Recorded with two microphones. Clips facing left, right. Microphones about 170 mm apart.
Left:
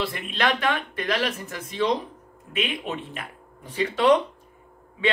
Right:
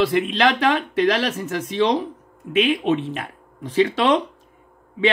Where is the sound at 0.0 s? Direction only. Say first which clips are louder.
Right 8 dB; 90° right.